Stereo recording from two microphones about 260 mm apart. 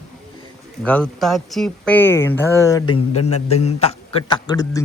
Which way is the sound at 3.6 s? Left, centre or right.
Left.